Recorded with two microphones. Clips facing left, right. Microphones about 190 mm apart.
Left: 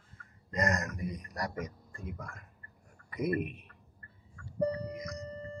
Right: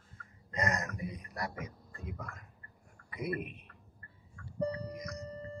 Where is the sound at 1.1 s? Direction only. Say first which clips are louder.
Left 2 dB; 45° left (ahead or behind).